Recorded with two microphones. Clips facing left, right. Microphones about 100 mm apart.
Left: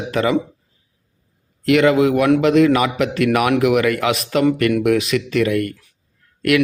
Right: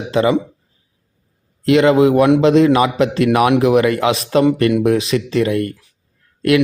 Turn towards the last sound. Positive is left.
turn(degrees=-25)  # may be behind; listen again after turning